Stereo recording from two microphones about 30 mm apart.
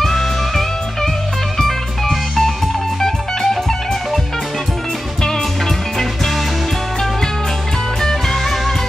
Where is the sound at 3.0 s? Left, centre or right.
Centre.